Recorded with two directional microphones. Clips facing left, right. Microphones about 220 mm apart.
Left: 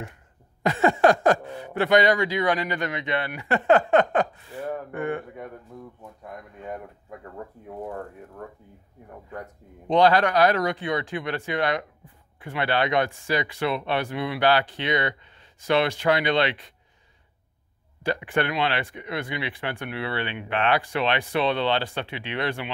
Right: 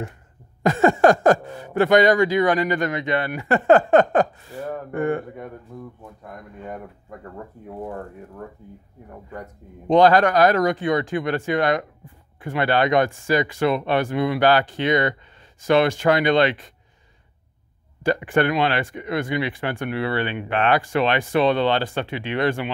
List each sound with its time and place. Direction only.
0.7 s speech: 45° right (ahead or behind)
9.8 s speech: 45° right (ahead or behind)
18.0 s speech: 45° right (ahead or behind)